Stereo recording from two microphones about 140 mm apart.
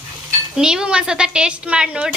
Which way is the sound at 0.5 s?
5° right (ahead or behind).